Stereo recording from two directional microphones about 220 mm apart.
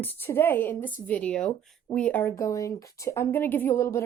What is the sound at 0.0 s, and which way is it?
A woman's voice, 10° left (ahead or behind).